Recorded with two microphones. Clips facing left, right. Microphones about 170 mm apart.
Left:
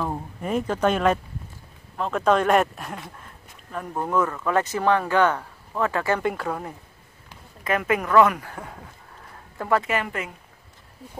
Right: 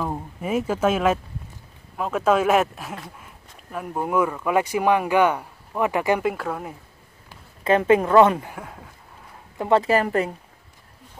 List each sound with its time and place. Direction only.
0.0 s speech: 5° right (ahead or behind)
6.2 s speech: centre (ahead or behind)
7.6 s speech: 30° right (ahead or behind)
8.5 s speech: centre (ahead or behind)
9.6 s speech: 25° right (ahead or behind)